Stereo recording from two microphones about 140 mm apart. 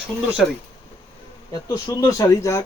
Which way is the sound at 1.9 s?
25° left (ahead or behind).